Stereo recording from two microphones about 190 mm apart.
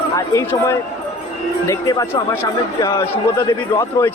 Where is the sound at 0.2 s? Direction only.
15° left (ahead or behind).